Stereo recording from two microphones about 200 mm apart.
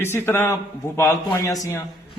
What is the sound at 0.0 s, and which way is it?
A man's voice, 10° left (ahead or behind).